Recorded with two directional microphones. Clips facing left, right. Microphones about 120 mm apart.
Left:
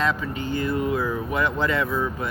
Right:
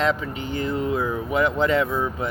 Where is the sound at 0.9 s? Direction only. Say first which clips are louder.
Right 2 dB; 20° right (ahead or behind).